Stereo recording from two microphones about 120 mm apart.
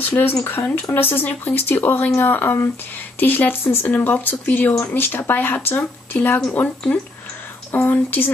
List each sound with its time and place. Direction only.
0.1 s speech: 15° left (ahead or behind)